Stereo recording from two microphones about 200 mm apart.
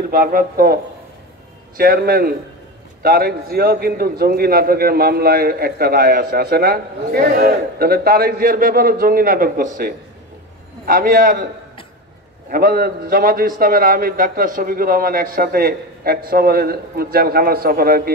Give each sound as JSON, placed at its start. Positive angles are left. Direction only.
{"t": 0.1, "sound": "a man's voice", "side_deg": -45}
{"t": 1.8, "sound": "a man's voice", "side_deg": -50}
{"t": 12.4, "sound": "a man's voice", "side_deg": -50}